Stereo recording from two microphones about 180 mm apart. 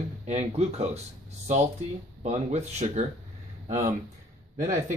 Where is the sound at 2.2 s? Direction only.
40° right (ahead or behind).